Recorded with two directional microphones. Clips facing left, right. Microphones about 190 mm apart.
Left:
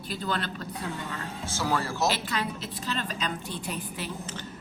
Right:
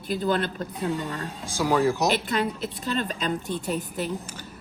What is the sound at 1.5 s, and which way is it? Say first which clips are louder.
Speech: right 7 dB; 15° right (ahead or behind).